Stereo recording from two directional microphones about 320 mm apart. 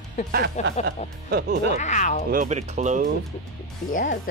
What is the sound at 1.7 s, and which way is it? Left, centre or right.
Speech, left.